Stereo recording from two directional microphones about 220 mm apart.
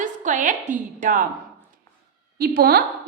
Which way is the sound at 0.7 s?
35° right (ahead or behind).